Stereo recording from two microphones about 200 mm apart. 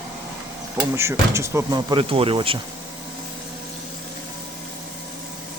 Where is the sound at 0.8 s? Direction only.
15° right (ahead or behind).